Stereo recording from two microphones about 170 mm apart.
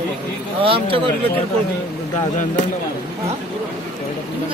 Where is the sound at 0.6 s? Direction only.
30° right (ahead or behind).